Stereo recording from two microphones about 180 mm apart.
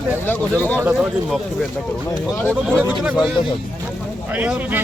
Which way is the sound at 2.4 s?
10° left (ahead or behind).